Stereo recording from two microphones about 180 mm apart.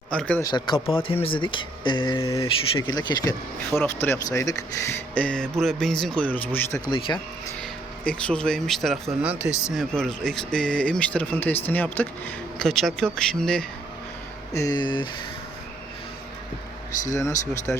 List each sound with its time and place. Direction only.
0.1 s speech: 5° left (ahead or behind)
0.4 s speech: 25° left (ahead or behind)
7.6 s speech: 5° left (ahead or behind)
9.7 s speech: 5° left (ahead or behind)
14.5 s speech: 20° left (ahead or behind)
17.7 s speech: 5° left (ahead or behind)